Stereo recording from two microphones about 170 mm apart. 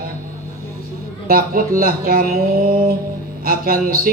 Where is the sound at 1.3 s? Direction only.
55° right (ahead or behind).